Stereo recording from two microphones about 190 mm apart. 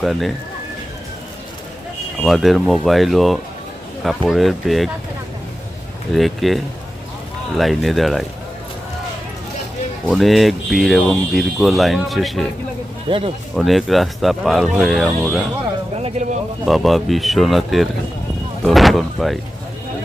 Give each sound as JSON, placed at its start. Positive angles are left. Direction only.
{"t": 0.0, "sound": "speech", "side_deg": 0}
{"t": 2.2, "sound": "speech", "side_deg": 0}
{"t": 6.1, "sound": "speech", "side_deg": 0}
{"t": 10.1, "sound": "speech", "side_deg": 0}
{"t": 13.1, "sound": "speech", "side_deg": -30}
{"t": 13.6, "sound": "speech", "side_deg": 0}
{"t": 16.0, "sound": "a sound", "side_deg": -35}
{"t": 16.6, "sound": "speech", "side_deg": 0}